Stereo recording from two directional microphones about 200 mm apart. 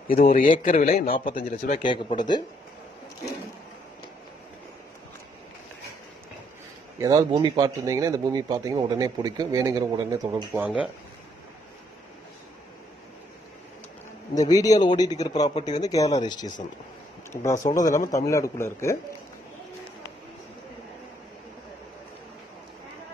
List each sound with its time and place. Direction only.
0.1 s speech: 45° left (ahead or behind)
1.8 s a man's voice: 25° left (ahead or behind)
7.0 s speech: 20° right (ahead or behind)
10.5 s speech: 5° right (ahead or behind)
14.3 s a man's voice: 20° left (ahead or behind)